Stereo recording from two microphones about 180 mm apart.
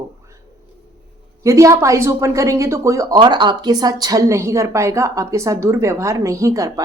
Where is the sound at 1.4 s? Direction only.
15° right (ahead or behind).